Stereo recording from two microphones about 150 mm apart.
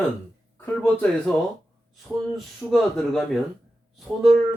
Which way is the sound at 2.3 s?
Centre (ahead or behind).